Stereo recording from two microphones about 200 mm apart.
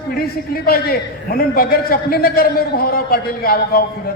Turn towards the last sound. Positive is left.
turn(degrees=50)  # may be behind; listen again after turning